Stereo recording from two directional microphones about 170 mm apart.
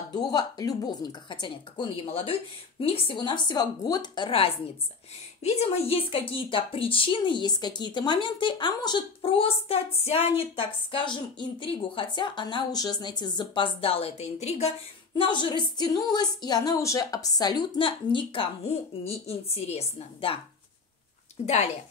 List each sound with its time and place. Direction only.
0.1 s speech: 25° left (ahead or behind)
21.4 s speech: 35° left (ahead or behind)